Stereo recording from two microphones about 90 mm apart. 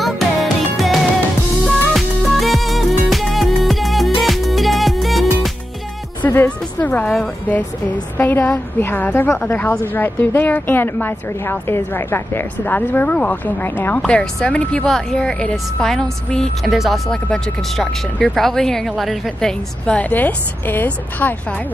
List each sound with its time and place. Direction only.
0.0 s music: centre (ahead or behind)
2.0 s music: centre (ahead or behind)
6.2 s a woman's voice: 20° left (ahead or behind); by 19.5 s centre (ahead or behind)
19.9 s a woman's voice: 15° left (ahead or behind)